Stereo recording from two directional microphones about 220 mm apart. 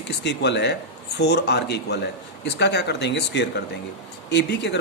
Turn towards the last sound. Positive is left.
turn(degrees=50)  # may be behind; listen again after turning